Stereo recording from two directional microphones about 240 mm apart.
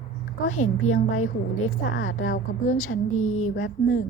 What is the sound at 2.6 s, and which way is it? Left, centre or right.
Speech, left.